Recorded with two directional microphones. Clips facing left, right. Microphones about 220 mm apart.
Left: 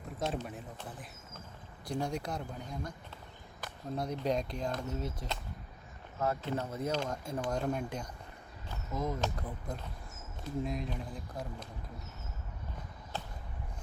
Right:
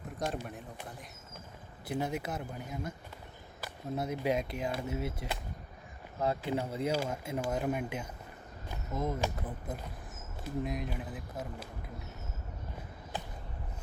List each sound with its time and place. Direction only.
0.2 s speech: centre (ahead or behind)
1.9 s speech: 5° right (ahead or behind)
8.7 s a sound: 25° right (ahead or behind)
9.1 s speech: 5° right (ahead or behind)